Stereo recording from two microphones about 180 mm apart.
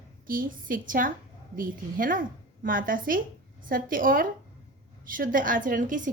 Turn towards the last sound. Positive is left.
turn(degrees=-45)  # may be behind; listen again after turning